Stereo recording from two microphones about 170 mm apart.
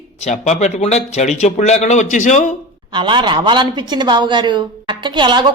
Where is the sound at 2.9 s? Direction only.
30° right (ahead or behind).